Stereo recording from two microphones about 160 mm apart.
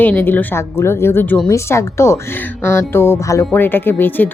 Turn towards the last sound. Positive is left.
turn(degrees=10)  # may be behind; listen again after turning